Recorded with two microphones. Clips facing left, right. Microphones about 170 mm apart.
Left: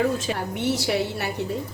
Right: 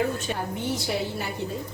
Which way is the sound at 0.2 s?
80° left.